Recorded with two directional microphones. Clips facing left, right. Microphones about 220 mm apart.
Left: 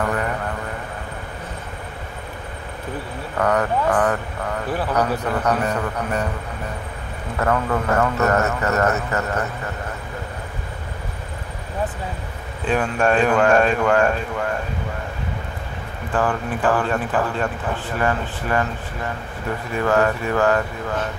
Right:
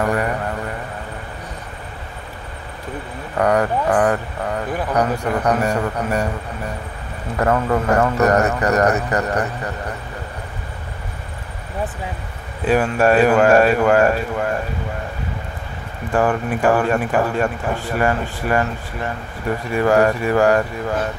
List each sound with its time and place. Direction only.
0.0 s vehicle: 10° right (ahead or behind)
3.3 s speech: 15° right (ahead or behind)
7.3 s speech: 20° right (ahead or behind)
12.6 s speech: 10° right (ahead or behind)
16.1 s speech: 10° right (ahead or behind)
19.7 s speech: 10° right (ahead or behind)